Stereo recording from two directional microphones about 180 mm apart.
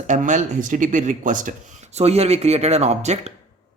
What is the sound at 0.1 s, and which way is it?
Speech, 45° right (ahead or behind).